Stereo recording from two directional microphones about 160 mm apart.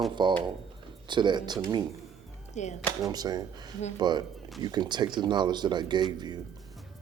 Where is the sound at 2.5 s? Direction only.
45° left (ahead or behind).